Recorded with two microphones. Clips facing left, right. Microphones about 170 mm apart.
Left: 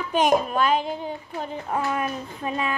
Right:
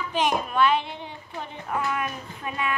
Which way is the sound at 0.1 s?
45° left (ahead or behind).